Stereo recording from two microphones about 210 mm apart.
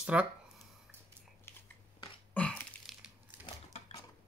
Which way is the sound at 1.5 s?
10° left (ahead or behind).